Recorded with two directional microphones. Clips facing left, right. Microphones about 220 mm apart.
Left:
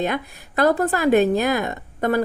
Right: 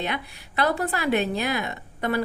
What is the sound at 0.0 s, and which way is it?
A woman's voice, 45° left (ahead or behind).